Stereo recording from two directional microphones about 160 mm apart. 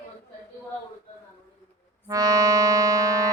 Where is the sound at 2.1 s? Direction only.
20° right (ahead or behind).